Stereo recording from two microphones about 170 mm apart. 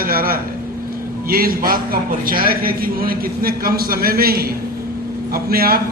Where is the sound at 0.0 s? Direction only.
60° right (ahead or behind).